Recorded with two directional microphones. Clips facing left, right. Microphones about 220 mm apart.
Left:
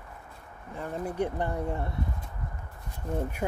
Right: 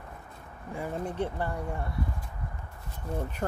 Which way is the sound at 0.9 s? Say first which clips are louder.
Left 3 dB; 10° left (ahead or behind).